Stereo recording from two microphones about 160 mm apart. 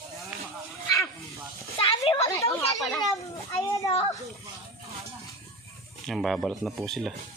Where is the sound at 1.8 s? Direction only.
35° left (ahead or behind).